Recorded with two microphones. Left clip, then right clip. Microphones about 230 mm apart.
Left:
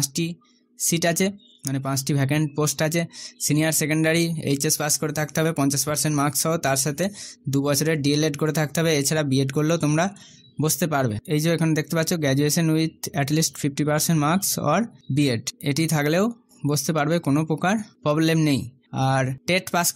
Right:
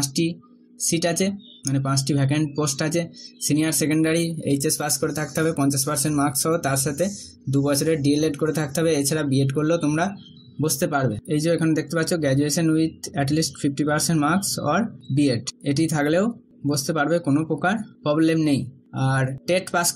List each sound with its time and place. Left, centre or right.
0.1 s speech: left